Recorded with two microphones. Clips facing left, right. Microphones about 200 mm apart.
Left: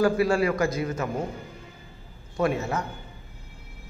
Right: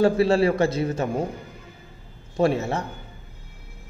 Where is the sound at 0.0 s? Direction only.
30° right (ahead or behind).